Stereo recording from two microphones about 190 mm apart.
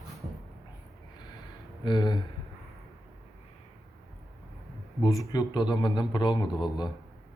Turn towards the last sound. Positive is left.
turn(degrees=25)  # may be behind; listen again after turning